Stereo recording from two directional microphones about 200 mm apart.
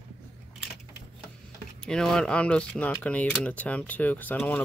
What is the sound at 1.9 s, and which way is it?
Speech, 5° left (ahead or behind).